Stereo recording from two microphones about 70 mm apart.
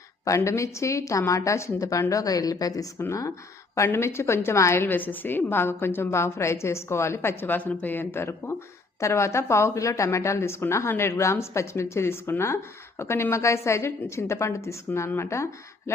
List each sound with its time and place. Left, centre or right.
0.3 s speech: left
3.1 s speech: left
3.8 s a woman's voice: left